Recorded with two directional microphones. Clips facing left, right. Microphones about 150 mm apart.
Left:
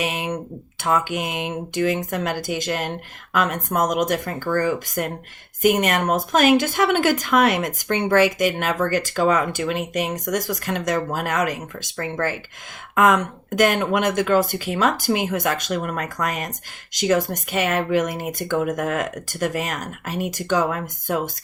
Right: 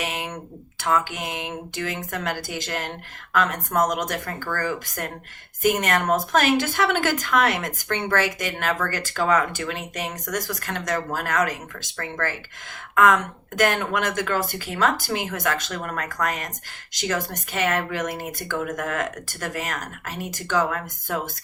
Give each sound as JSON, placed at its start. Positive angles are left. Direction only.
{"t": 0.0, "sound": "a sound", "side_deg": 15}
{"t": 0.9, "sound": "speech", "side_deg": 20}
{"t": 13.6, "sound": "speech", "side_deg": 15}